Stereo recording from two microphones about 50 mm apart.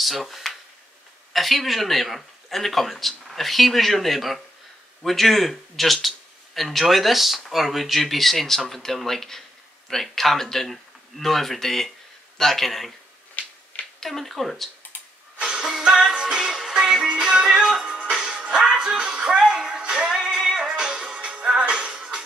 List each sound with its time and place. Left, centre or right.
0.0 s speech: centre
13.4 s typewriter: left
13.9 s speech: centre
15.3 s music: centre